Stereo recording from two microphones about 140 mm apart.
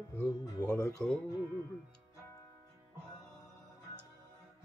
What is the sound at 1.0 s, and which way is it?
Speech, 5° left (ahead or behind).